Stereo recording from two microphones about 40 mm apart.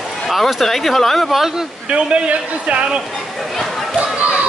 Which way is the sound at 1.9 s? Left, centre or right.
Right.